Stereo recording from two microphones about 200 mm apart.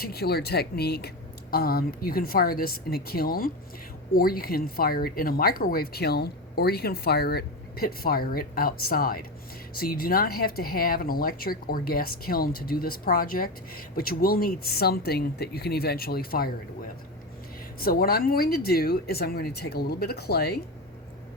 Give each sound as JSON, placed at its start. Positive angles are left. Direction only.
{"t": 0.0, "sound": "speech", "side_deg": 50}
{"t": 17.7, "sound": "speech", "side_deg": 45}